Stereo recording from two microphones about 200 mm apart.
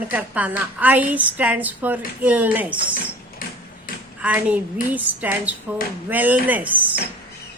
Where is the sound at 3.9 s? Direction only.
45° left (ahead or behind).